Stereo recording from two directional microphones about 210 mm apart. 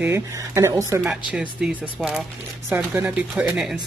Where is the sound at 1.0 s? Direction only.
5° right (ahead or behind).